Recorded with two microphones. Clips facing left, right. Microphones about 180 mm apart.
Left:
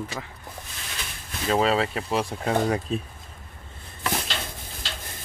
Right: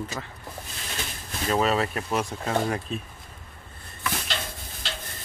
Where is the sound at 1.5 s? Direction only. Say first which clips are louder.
Left 2 dB; 30° left (ahead or behind).